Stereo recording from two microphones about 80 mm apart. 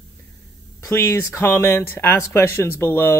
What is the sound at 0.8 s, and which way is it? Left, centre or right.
Speech, left.